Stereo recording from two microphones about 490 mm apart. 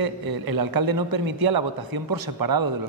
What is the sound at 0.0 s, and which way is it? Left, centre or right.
A man's voice, right.